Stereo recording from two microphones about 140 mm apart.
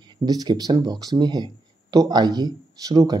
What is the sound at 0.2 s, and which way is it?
Speech, 30° right (ahead or behind).